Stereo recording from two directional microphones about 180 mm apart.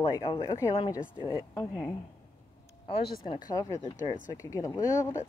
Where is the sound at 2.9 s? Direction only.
30° left (ahead or behind).